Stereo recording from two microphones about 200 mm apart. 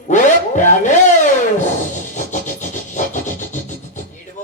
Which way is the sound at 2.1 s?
35° left (ahead or behind).